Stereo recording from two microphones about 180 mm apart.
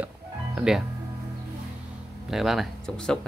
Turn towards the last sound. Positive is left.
turn(degrees=5)  # may be behind; listen again after turning